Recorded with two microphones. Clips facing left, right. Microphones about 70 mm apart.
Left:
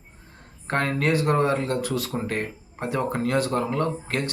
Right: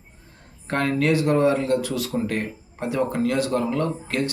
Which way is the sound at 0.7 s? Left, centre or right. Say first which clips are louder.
Right 2 dB; left.